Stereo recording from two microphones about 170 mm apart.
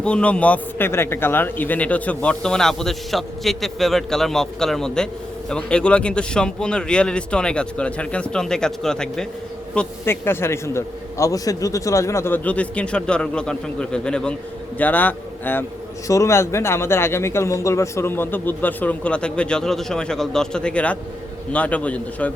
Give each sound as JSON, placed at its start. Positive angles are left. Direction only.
{"t": 0.0, "sound": "a man's voice", "side_deg": 5}
{"t": 9.7, "sound": "speech", "side_deg": 15}